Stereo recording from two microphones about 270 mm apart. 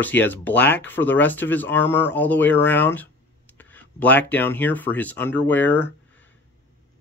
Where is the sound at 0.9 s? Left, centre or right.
Centre.